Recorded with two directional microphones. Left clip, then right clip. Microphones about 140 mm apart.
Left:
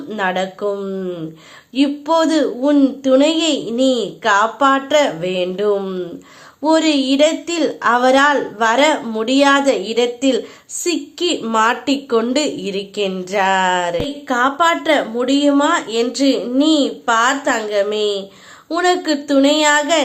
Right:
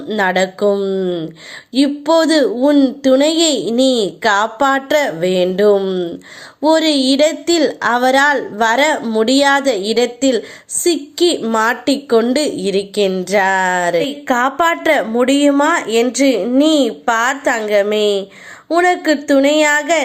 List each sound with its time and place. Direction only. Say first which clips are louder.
0.2 s a woman's voice: right 5 dB; 35° right (ahead or behind)
14.3 s speech: left 1 dB; 40° right (ahead or behind)